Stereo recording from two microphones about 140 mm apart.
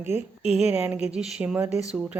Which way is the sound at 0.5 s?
5° right (ahead or behind).